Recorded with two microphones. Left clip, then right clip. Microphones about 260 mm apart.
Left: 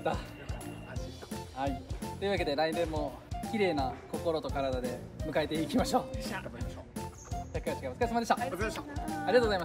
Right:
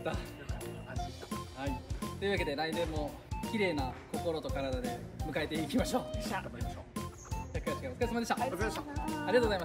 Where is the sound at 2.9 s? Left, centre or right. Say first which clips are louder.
Left 3 dB; centre.